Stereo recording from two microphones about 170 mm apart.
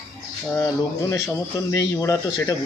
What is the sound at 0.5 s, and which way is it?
Speech, 20° left (ahead or behind).